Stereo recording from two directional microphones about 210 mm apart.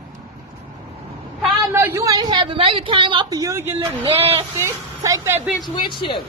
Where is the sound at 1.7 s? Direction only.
15° right (ahead or behind).